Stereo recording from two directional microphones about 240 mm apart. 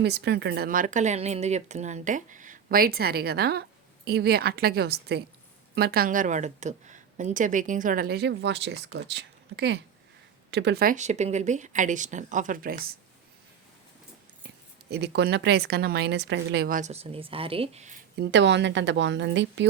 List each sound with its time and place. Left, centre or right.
0.0 s speech: right
14.8 s speech: right
18.2 s speech: right